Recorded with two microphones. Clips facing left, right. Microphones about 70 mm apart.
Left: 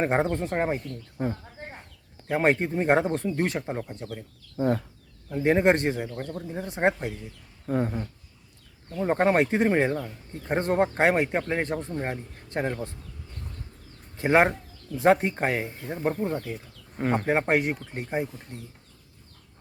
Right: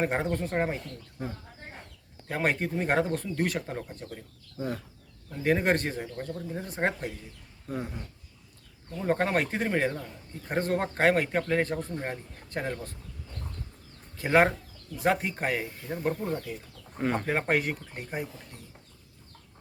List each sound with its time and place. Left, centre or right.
0.0 s speech: left
1.2 s speech: left
2.2 s speech: left
4.5 s speech: left
5.3 s speech: left
7.7 s speech: left
9.0 s speech: left
14.2 s speech: left
17.0 s speech: centre
17.2 s speech: left